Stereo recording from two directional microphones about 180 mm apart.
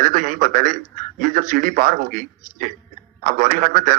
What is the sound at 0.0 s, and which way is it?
Speech, 45° right (ahead or behind).